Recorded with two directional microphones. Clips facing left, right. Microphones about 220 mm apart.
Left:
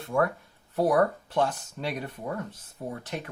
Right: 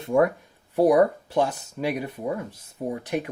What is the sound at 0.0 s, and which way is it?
Speech, 20° right (ahead or behind).